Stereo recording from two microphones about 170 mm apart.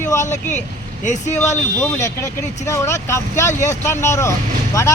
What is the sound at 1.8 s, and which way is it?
Speech, 15° left (ahead or behind).